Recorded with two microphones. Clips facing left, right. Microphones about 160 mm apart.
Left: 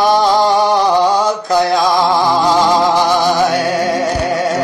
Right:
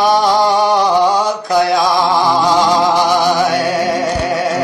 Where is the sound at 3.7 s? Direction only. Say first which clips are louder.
Even; 15° left (ahead or behind).